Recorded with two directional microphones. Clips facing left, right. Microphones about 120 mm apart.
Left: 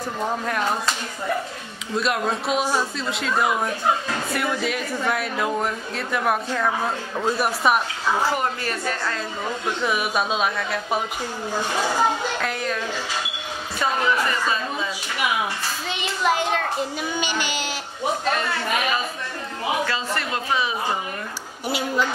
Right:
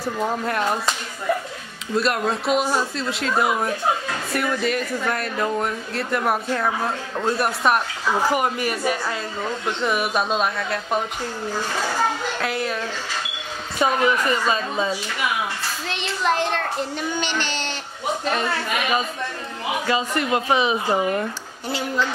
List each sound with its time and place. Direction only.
0.0 s speech: centre (ahead or behind)
2.0 s speech: centre (ahead or behind)
8.3 s speech: 10° right (ahead or behind)
9.7 s speech: centre (ahead or behind)
12.4 s speech: 5° right (ahead or behind)
13.7 s a woman's voice: 20° right (ahead or behind)
15.9 s speech: 5° left (ahead or behind)
17.1 s child singing: 10° left (ahead or behind)
19.9 s a woman's voice: 20° right (ahead or behind)
21.6 s child singing: 10° left (ahead or behind)